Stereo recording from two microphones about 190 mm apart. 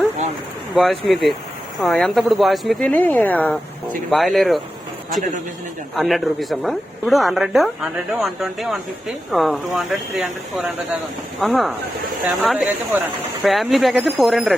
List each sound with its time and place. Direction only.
0.8 s speech: centre (ahead or behind)
5.9 s speech: centre (ahead or behind)